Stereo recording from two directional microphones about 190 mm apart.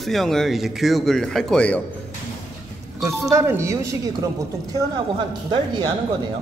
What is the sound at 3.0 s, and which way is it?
Speech, 15° right (ahead or behind).